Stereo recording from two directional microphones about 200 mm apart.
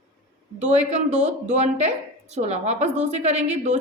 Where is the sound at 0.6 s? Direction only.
35° right (ahead or behind).